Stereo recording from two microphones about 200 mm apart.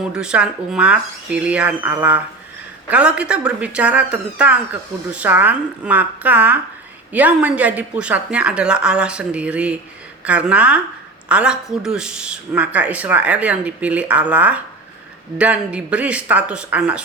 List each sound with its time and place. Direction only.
0.1 s speech: 5° right (ahead or behind)